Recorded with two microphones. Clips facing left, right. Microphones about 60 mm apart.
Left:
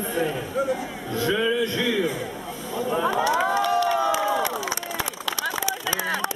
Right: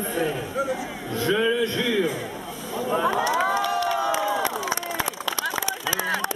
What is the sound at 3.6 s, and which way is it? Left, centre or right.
Crowd, left.